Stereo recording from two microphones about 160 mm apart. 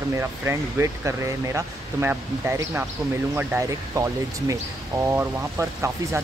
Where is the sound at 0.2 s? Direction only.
15° right (ahead or behind).